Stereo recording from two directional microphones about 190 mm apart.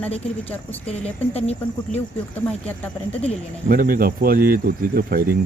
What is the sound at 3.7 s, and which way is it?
Speech, 50° right (ahead or behind).